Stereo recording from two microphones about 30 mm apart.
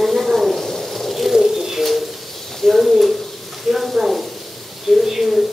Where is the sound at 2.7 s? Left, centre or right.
Centre.